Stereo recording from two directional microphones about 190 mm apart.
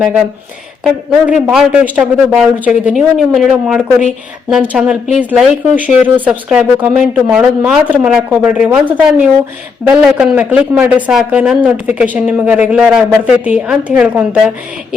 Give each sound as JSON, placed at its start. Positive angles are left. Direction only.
{"t": 0.9, "sound": "a man's voice", "side_deg": 0}